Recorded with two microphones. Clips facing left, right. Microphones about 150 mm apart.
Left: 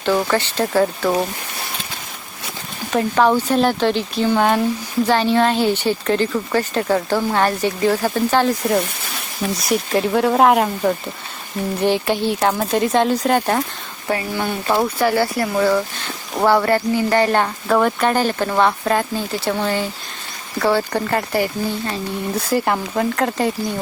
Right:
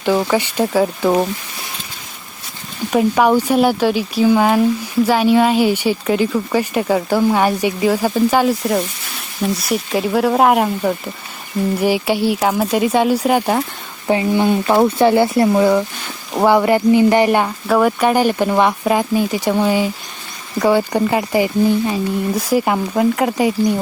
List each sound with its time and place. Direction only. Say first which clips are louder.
0.0 s a woman's voice: right 2 dB; 15° right (ahead or behind)
2.9 s a woman's voice: right 3 dB; 10° right (ahead or behind)